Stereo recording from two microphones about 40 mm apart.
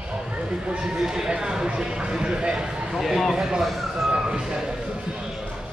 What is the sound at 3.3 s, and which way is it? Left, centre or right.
Speech, centre.